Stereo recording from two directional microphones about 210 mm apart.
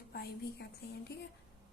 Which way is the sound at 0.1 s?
50° left (ahead or behind).